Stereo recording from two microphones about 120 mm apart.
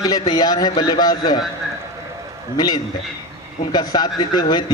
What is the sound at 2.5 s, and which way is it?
A man's voice, 35° left (ahead or behind).